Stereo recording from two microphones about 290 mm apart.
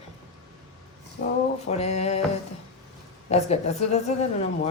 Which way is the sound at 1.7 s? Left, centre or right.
Left.